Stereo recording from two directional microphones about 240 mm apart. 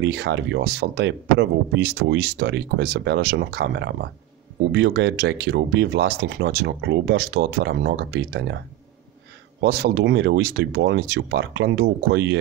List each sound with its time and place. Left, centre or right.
0.0 s speech: right